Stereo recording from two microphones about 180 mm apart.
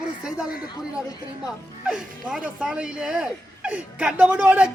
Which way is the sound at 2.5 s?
5° right (ahead or behind).